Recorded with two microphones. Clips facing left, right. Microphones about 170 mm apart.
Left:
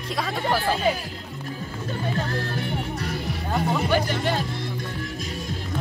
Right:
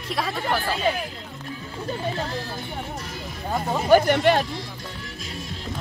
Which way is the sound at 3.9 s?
65° right (ahead or behind).